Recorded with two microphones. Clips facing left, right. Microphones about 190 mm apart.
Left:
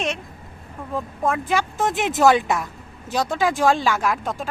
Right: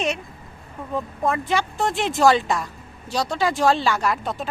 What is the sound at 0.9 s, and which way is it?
Speech, centre (ahead or behind).